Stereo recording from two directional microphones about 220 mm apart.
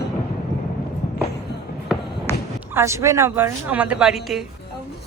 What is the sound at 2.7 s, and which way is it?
A woman's voice, 10° right (ahead or behind).